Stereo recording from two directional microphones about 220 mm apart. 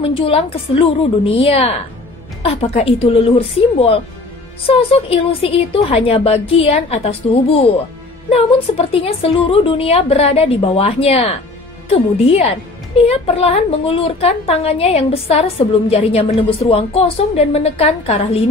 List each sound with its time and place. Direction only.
0.0 s a woman's voice: 25° left (ahead or behind)